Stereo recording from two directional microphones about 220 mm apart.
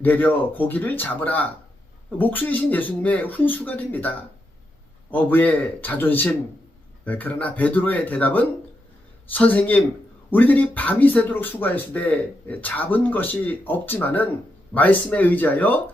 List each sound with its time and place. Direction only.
0.0 s speech: 10° left (ahead or behind)
5.1 s speech: 10° left (ahead or behind)